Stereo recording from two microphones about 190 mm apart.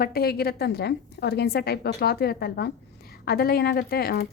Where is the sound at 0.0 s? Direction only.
55° left (ahead or behind).